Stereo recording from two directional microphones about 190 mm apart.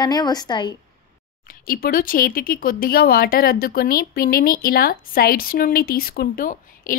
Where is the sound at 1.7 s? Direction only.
50° left (ahead or behind).